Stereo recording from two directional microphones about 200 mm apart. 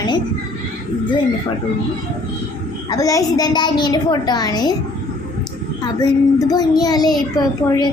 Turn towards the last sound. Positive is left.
turn(degrees=20)  # may be behind; listen again after turning